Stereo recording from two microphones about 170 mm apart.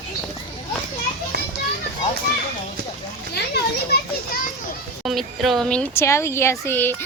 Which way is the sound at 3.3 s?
70° left (ahead or behind).